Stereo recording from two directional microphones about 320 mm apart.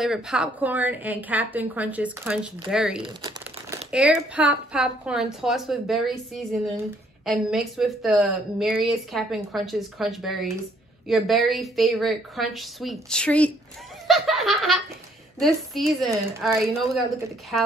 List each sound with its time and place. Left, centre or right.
0.0 s a woman's voice: centre
3.0 s speech: centre
3.9 s a woman's voice: centre
7.2 s a woman's voice: centre
14.0 s snicker: centre
15.3 s a woman's voice: centre